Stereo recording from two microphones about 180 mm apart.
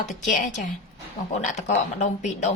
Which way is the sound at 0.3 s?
45° left (ahead or behind).